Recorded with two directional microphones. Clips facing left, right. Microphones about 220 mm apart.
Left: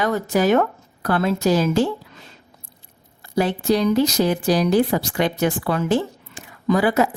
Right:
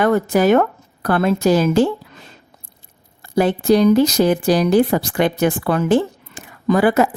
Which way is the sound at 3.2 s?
50° right (ahead or behind).